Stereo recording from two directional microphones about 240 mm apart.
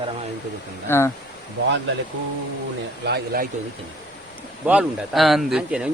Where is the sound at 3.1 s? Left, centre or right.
Right.